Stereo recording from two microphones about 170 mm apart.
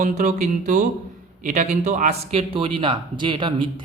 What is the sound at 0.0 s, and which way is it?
A man's voice, 45° right (ahead or behind).